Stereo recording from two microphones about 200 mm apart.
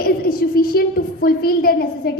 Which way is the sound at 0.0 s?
50° left (ahead or behind).